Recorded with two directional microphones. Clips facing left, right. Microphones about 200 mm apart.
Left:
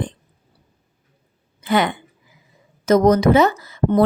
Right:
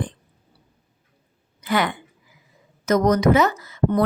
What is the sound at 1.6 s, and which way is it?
A woman's voice, 25° left (ahead or behind).